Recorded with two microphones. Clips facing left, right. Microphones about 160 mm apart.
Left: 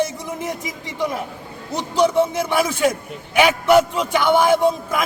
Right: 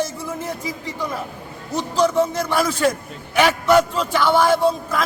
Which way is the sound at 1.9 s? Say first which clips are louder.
Left 1 dB; 10° left (ahead or behind).